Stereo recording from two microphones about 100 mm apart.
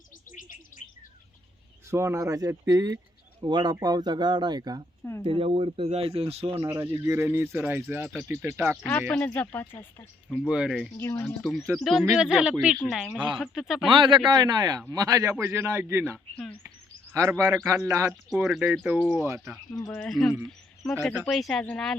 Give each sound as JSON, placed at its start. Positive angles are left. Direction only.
{"t": 1.9, "sound": "speech", "side_deg": -25}
{"t": 5.2, "sound": "speech", "side_deg": -70}
{"t": 6.7, "sound": "speech", "side_deg": -30}
{"t": 8.9, "sound": "speech", "side_deg": 15}
{"t": 10.2, "sound": "speech", "side_deg": -5}
{"t": 10.9, "sound": "speech", "side_deg": 25}
{"t": 11.4, "sound": "speech", "side_deg": 0}
{"t": 13.8, "sound": "speech", "side_deg": -55}
{"t": 14.3, "sound": "speech", "side_deg": -45}
{"t": 17.2, "sound": "speech", "side_deg": -30}
{"t": 19.9, "sound": "speech", "side_deg": 5}